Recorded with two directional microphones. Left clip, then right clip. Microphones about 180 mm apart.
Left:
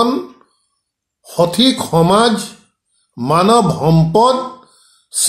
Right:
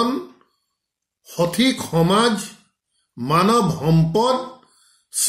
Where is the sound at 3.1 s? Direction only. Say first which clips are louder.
Left 6 dB; 10° right (ahead or behind).